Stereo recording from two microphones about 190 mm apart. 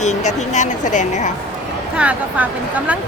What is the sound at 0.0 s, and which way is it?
Speech, 35° left (ahead or behind).